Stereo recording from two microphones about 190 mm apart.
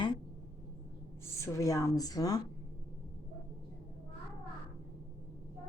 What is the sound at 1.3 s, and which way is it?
A woman's voice, 15° left (ahead or behind).